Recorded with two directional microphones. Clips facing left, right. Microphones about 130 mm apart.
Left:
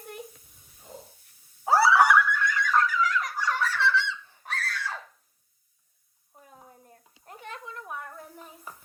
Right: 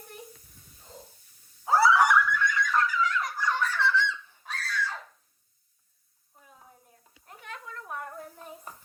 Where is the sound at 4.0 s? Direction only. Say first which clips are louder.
Right 1 dB; 60° left (ahead or behind).